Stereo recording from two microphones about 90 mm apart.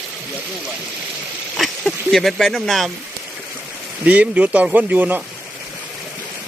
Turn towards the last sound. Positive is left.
turn(degrees=-20)  # may be behind; listen again after turning